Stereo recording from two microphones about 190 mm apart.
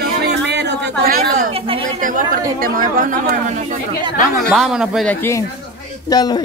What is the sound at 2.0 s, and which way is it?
Chatter, 45° right (ahead or behind).